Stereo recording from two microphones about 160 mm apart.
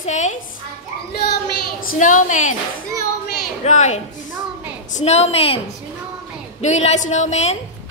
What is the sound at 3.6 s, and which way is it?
A woman's voice, 45° left (ahead or behind).